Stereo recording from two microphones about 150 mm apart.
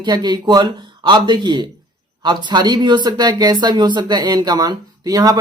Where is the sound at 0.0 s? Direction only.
30° right (ahead or behind).